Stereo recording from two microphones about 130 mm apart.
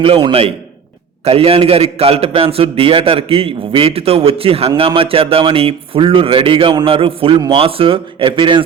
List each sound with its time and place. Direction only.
0.2 s a man's voice: 40° right (ahead or behind)